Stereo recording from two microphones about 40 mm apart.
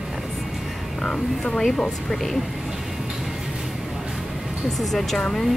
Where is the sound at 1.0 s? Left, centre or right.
Left.